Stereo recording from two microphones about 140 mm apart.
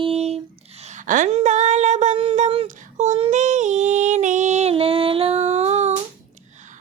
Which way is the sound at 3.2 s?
55° right (ahead or behind).